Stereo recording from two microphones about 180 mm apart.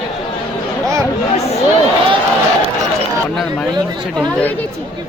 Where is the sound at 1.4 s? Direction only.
35° left (ahead or behind).